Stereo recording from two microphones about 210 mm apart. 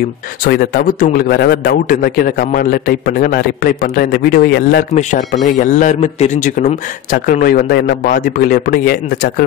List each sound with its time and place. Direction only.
0.4 s speech: 45° left (ahead or behind)
4.9 s speech: 35° left (ahead or behind)